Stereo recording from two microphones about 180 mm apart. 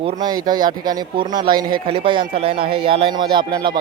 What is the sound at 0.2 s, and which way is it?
A man's voice, 20° right (ahead or behind).